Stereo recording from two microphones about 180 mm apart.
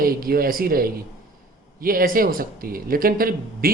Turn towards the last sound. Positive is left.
turn(degrees=-55)  # may be behind; listen again after turning